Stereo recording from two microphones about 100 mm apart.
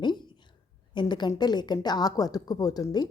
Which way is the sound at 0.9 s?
45° left (ahead or behind).